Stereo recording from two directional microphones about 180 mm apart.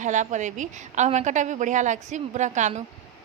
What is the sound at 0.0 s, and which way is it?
A woman's voice, 45° right (ahead or behind).